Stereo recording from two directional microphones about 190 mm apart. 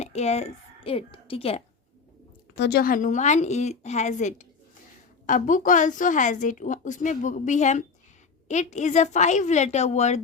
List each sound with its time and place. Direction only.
0.0 s a woman's voice: 35° left (ahead or behind)
2.6 s a woman's voice: 60° left (ahead or behind); by 10.2 s 35° left (ahead or behind)